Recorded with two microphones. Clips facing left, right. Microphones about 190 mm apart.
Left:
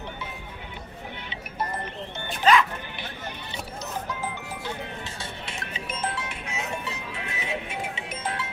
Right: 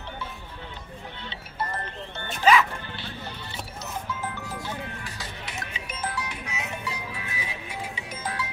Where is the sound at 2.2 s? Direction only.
Centre (ahead or behind).